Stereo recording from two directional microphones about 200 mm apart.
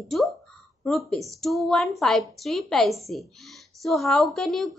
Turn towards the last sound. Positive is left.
turn(degrees=0)  # may be behind; listen again after turning